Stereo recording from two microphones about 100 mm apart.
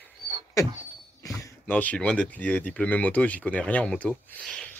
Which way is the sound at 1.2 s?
35° left (ahead or behind).